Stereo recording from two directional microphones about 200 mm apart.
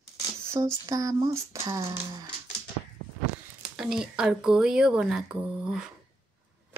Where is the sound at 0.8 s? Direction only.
15° right (ahead or behind).